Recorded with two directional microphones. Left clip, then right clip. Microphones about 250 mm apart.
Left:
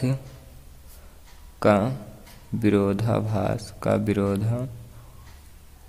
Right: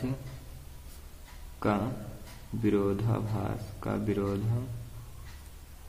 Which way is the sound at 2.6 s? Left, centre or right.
Left.